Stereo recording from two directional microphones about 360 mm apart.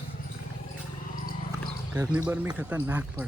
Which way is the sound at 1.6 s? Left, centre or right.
Centre.